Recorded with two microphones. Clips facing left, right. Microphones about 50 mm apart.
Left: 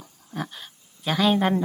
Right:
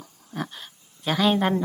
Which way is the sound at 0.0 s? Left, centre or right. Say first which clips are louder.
Even; centre.